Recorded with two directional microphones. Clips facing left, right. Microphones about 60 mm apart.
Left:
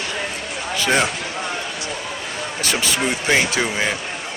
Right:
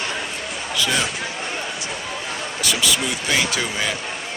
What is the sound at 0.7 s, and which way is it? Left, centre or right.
Speech, left.